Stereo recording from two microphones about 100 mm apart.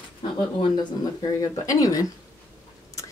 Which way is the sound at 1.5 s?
35° left (ahead or behind).